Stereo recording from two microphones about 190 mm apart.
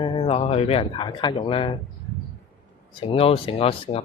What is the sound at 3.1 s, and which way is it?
Speech, 30° left (ahead or behind).